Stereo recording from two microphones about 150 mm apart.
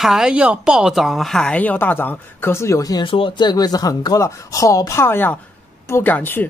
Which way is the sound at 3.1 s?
35° left (ahead or behind).